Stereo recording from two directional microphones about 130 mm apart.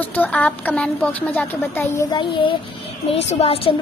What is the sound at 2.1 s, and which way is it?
Speech, 40° left (ahead or behind).